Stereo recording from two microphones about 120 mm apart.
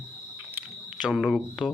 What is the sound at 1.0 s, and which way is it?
Speech, 5° right (ahead or behind).